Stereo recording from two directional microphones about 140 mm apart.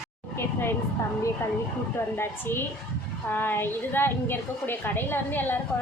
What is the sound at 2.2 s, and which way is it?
A woman's voice, 15° left (ahead or behind).